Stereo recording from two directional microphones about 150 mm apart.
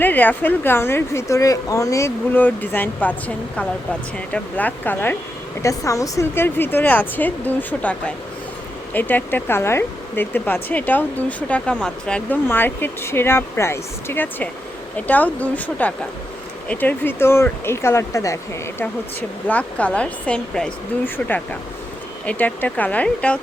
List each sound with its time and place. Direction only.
0.0 s speech: 10° left (ahead or behind)
19.5 s speech: 10° left (ahead or behind)
22.3 s speech: 10° left (ahead or behind)